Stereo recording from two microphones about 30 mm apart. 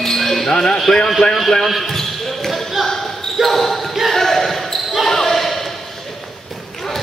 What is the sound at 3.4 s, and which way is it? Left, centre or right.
Basketball bounce, centre.